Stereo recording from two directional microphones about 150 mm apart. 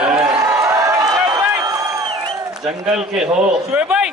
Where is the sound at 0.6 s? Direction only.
20° right (ahead or behind).